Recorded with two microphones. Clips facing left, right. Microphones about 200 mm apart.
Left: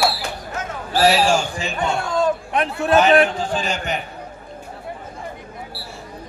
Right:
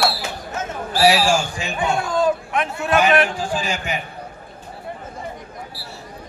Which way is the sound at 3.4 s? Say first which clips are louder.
Left 1 dB; 10° right (ahead or behind).